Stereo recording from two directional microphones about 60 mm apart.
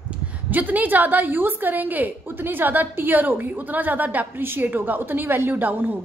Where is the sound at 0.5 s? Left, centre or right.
Right.